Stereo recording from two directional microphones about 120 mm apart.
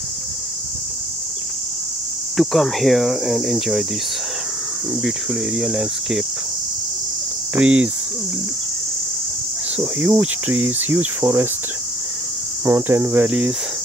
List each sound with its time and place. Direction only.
2.3 s speech: centre (ahead or behind)
5.0 s speech: 5° right (ahead or behind)
7.5 s cricket: 10° right (ahead or behind)
10.0 s cricket: 10° right (ahead or behind)
12.6 s cricket: 20° right (ahead or behind)